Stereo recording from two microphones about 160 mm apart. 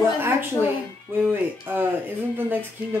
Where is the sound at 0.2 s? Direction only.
15° right (ahead or behind).